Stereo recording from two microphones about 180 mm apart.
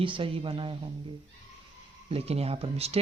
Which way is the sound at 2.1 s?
35° right (ahead or behind).